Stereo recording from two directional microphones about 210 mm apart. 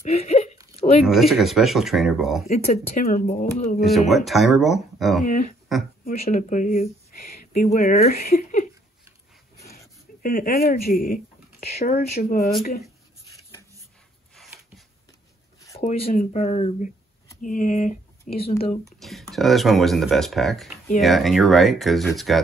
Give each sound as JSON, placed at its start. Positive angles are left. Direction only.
{"t": 0.0, "sound": "a sound", "side_deg": 30}
{"t": 1.0, "sound": "speech", "side_deg": 0}
{"t": 2.5, "sound": "speech", "side_deg": 40}
{"t": 3.8, "sound": "speech", "side_deg": 0}
{"t": 5.2, "sound": "speech", "side_deg": 40}
{"t": 10.2, "sound": "speech", "side_deg": 45}
{"t": 15.8, "sound": "speech", "side_deg": 35}
{"t": 18.9, "sound": "speech", "side_deg": 0}